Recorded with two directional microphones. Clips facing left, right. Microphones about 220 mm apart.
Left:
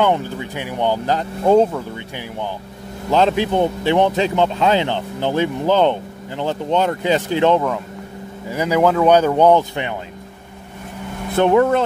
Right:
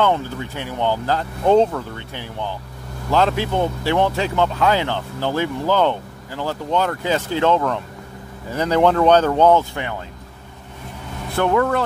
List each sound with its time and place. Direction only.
0.0 s speech: 15° left (ahead or behind)
11.3 s speech: 20° left (ahead or behind)